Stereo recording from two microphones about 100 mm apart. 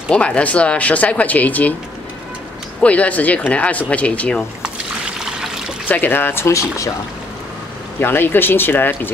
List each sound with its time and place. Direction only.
0.1 s speech: 10° left (ahead or behind)
2.8 s speech: 15° left (ahead or behind)
5.2 s water: 5° right (ahead or behind)
5.9 s speech: 20° left (ahead or behind)
8.0 s speech: 20° left (ahead or behind)